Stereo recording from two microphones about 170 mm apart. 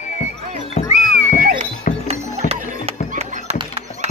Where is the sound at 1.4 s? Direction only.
50° right (ahead or behind).